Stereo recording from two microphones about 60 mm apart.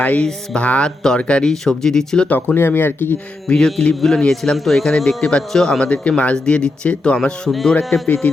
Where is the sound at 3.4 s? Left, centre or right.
Centre.